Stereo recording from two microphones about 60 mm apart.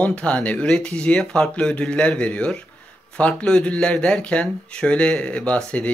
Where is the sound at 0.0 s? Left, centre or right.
Left.